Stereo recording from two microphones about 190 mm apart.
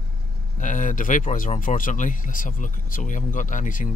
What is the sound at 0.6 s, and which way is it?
Speech, 40° left (ahead or behind).